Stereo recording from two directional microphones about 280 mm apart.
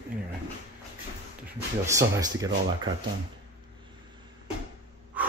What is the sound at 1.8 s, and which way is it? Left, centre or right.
Speech, centre.